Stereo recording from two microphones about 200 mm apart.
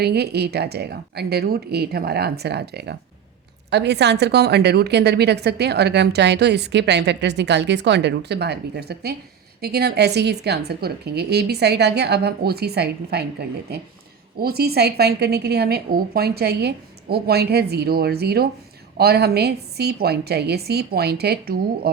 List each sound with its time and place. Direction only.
0.0 s a woman's voice: 55° right (ahead or behind)
14.3 s a woman's voice: 50° right (ahead or behind)